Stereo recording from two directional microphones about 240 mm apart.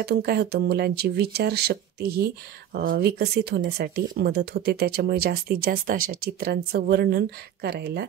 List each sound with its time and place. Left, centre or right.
0.0 s speech: right